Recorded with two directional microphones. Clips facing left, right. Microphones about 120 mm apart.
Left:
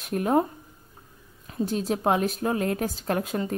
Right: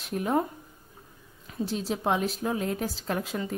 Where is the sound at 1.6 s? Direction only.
50° left (ahead or behind).